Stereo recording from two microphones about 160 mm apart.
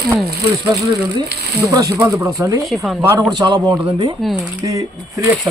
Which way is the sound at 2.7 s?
Centre (ahead or behind).